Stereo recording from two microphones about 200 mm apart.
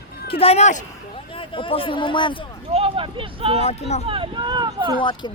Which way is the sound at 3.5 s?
30° left (ahead or behind).